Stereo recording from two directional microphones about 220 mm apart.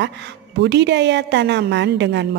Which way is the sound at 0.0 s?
50° right (ahead or behind).